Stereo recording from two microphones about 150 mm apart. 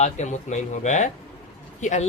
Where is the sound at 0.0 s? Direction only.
50° left (ahead or behind).